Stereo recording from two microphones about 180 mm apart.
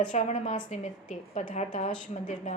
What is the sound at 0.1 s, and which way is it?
A woman's voice, 40° left (ahead or behind).